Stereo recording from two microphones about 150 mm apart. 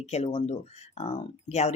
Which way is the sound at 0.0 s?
45° left (ahead or behind).